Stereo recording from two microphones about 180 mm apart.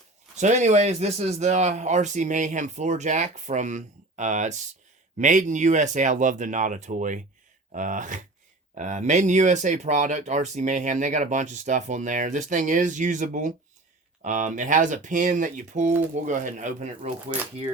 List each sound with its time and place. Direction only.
0.3 s speech: 40° right (ahead or behind)